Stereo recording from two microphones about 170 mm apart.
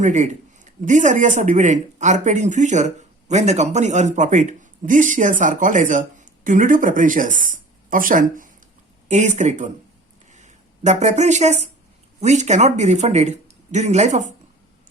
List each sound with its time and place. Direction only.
0.0 s a man's voice: 45° right (ahead or behind)